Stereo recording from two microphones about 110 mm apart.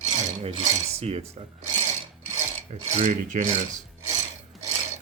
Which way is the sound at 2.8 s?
90° right.